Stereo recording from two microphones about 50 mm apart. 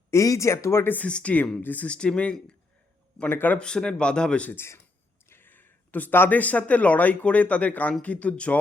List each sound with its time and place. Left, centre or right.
0.1 s speech: left
1.0 s speech: left
1.9 s speech: centre
3.3 s speech: left
3.6 s speech: centre
4.5 s speech: left
5.3 s a sound: left
6.1 s speech: left
6.4 s speech: left